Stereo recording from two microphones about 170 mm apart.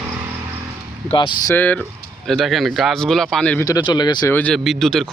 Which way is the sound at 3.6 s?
25° left (ahead or behind).